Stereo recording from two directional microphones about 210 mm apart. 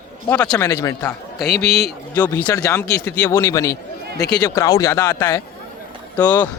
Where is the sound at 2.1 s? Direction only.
10° left (ahead or behind).